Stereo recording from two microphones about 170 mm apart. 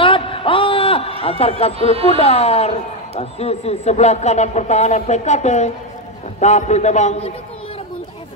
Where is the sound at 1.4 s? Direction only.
35° left (ahead or behind).